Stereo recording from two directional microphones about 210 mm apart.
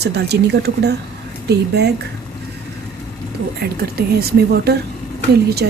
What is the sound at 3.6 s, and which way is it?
Speech, 50° right (ahead or behind).